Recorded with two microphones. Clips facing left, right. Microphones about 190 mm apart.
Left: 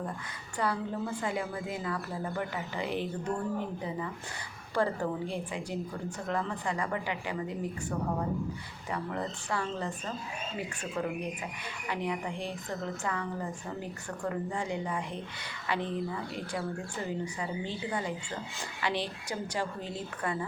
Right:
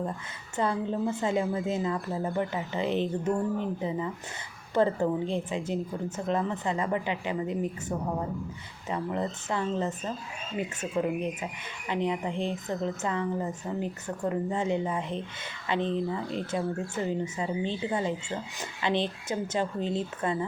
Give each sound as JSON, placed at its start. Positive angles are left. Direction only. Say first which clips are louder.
{"t": 0.5, "sound": "a woman's voice", "louder": "right 4 dB", "side_deg": -25}